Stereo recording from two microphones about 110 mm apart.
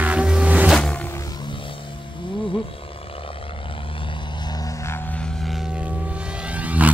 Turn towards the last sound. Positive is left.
turn(degrees=-15)  # may be behind; listen again after turning